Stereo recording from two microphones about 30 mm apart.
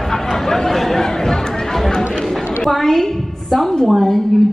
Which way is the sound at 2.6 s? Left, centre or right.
Centre.